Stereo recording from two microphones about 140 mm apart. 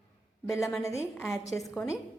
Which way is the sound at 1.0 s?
15° left (ahead or behind).